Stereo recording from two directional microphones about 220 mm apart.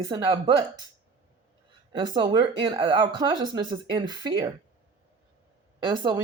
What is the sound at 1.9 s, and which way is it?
Speech, 20° right (ahead or behind).